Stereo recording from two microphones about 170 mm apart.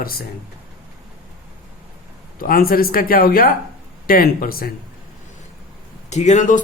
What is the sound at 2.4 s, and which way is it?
Speech, 60° left (ahead or behind).